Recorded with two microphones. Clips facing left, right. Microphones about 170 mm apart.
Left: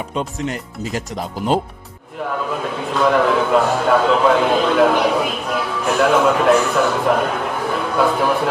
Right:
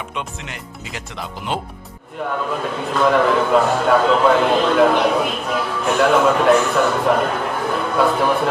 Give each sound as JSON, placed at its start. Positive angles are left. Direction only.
{"t": 0.1, "sound": "speech", "side_deg": 40}
{"t": 2.2, "sound": "a man's voice", "side_deg": 0}